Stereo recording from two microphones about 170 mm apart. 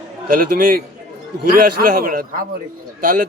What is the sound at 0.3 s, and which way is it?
Speech, 60° right (ahead or behind).